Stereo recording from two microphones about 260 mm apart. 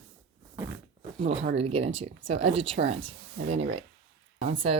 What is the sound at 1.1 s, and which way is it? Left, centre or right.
Speech, right.